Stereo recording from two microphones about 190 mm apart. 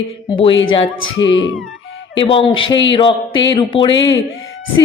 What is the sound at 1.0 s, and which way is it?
Speech, 85° left.